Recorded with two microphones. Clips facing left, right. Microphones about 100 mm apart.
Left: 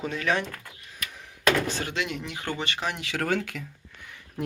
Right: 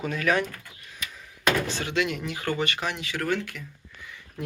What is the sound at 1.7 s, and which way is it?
Speech, 40° left (ahead or behind).